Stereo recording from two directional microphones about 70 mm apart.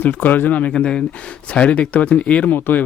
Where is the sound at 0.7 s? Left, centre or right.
Centre; by 2.8 s left.